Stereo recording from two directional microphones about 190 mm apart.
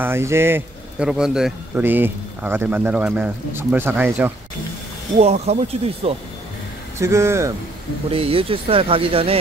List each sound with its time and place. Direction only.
0.0 s speech: 15° right (ahead or behind)
5.2 s speech: 35° right (ahead or behind)
7.0 s speech: 15° right (ahead or behind)
8.1 s speech: 30° right (ahead or behind)